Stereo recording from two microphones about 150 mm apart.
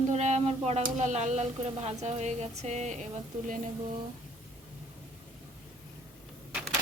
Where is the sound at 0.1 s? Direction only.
50° right (ahead or behind).